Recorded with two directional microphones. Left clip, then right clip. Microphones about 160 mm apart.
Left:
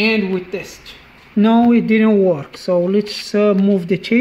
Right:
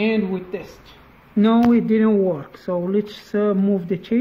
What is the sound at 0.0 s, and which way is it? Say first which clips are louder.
Speech: left 5 dB; 20° left (ahead or behind).